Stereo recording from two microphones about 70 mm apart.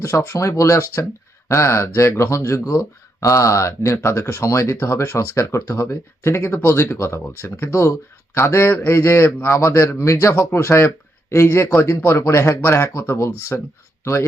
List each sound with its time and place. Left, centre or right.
0.0 s speech: left
7.4 s speech: left
7.7 s speech: left